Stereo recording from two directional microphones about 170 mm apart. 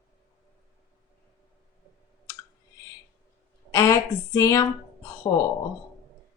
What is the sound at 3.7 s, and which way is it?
Speech, 20° left (ahead or behind).